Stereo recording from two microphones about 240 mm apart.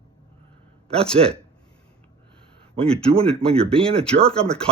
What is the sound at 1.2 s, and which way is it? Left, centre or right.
Speech, right.